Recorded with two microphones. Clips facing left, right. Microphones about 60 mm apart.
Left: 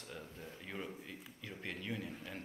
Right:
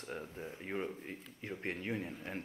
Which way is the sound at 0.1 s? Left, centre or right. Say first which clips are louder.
Right 6 dB; right.